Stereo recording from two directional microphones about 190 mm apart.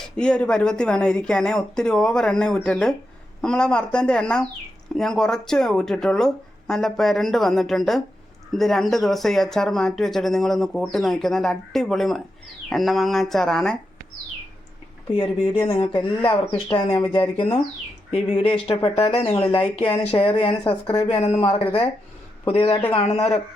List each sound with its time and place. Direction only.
0.0 s speech: 5° left (ahead or behind)
15.1 s speech: 30° left (ahead or behind)